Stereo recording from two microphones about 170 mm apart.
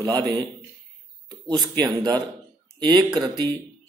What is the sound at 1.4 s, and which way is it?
A man's voice, 25° right (ahead or behind).